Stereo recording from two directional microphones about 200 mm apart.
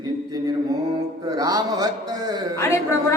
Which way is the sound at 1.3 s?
20° right (ahead or behind).